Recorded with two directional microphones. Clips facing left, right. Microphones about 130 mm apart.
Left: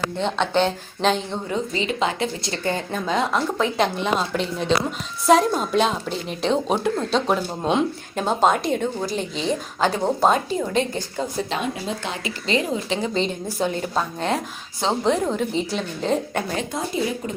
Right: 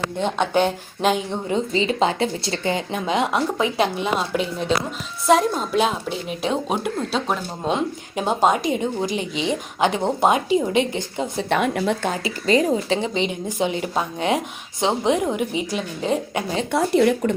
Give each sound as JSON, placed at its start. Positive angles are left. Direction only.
{"t": 0.2, "sound": "speech", "side_deg": -10}
{"t": 1.5, "sound": "speech", "side_deg": -30}
{"t": 2.6, "sound": "a woman's voice", "side_deg": -15}
{"t": 11.4, "sound": "speech", "side_deg": -65}
{"t": 12.0, "sound": "speech", "side_deg": -40}
{"t": 13.1, "sound": "speech", "side_deg": -15}
{"t": 16.7, "sound": "speech", "side_deg": -70}